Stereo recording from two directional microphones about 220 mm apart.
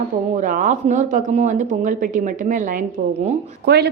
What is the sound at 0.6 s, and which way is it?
Speech, 35° right (ahead or behind).